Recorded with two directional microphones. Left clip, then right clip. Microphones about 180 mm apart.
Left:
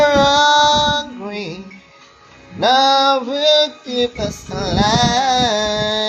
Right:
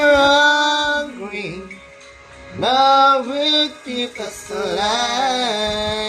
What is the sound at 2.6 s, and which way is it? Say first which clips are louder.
Male singing: even; 30° left (ahead or behind).